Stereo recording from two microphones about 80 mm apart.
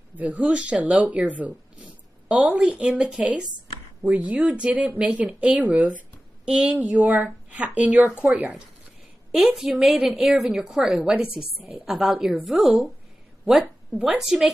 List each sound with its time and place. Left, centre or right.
0.3 s a woman's voice: centre
0.6 s speech: centre
1.1 s a sound: centre
2.7 s speech: centre
9.3 s a woman's voice: centre
13.5 s speech: centre
14.2 s a woman's voice: centre